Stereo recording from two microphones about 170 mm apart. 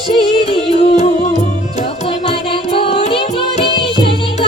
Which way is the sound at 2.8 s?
30° left (ahead or behind).